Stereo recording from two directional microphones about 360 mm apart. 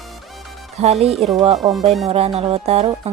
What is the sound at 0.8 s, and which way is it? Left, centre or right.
Speech, centre.